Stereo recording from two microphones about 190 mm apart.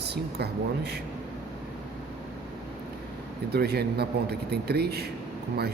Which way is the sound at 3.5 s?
55° right (ahead or behind).